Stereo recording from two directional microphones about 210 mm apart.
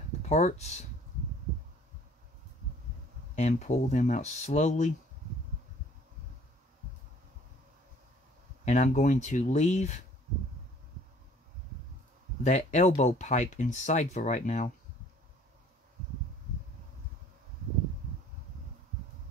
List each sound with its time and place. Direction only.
0.2 s speech: 35° left (ahead or behind)
3.3 s speech: 35° left (ahead or behind)
8.6 s speech: 35° left (ahead or behind)
12.4 s speech: 35° left (ahead or behind)